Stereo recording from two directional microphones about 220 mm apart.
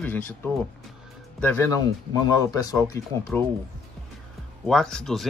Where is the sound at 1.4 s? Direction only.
10° left (ahead or behind).